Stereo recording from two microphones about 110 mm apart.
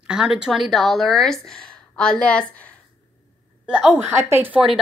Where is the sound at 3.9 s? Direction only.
20° right (ahead or behind).